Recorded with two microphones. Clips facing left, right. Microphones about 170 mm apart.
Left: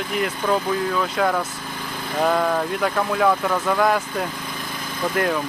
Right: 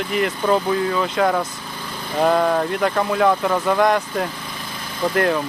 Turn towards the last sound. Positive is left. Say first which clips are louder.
# right 3 dB
turn(degrees=0)  # may be behind; listen again after turning